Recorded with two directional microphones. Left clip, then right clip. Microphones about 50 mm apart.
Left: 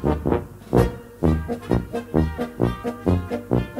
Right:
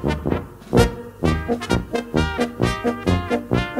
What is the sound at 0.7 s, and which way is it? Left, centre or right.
Music, left.